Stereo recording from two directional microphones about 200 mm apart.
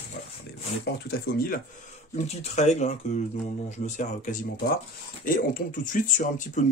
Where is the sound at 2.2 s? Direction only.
35° left (ahead or behind).